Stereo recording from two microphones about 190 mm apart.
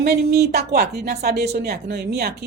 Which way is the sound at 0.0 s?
55° right (ahead or behind).